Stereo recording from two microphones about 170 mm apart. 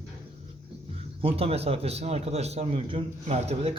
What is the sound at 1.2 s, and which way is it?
A man's voice, 35° right (ahead or behind).